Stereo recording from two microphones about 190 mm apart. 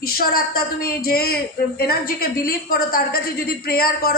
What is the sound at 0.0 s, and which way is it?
Speech, 50° left (ahead or behind).